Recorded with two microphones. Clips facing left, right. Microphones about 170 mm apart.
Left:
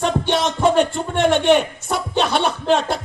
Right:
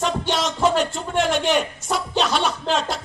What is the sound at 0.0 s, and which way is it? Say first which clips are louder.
A man's voice: left 4 dB; 60° left (ahead or behind).